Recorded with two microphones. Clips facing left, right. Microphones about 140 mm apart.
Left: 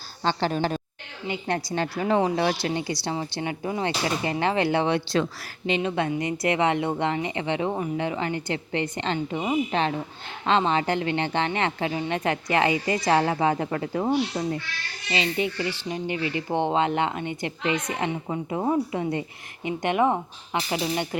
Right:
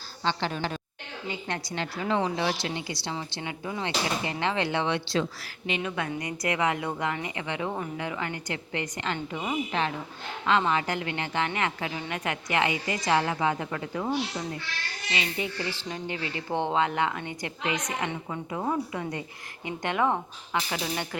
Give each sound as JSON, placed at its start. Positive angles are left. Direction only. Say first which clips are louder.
{"t": 0.2, "sound": "a woman's voice", "louder": "left 5 dB", "side_deg": 45}
{"t": 1.7, "sound": "a woman's voice", "louder": "left 4 dB", "side_deg": 45}
{"t": 15.1, "sound": "speech", "louder": "left 6 dB", "side_deg": 25}